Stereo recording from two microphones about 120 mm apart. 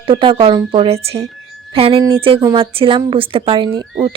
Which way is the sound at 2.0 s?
25° right (ahead or behind).